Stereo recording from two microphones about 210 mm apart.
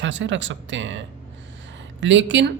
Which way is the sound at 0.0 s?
60° right (ahead or behind).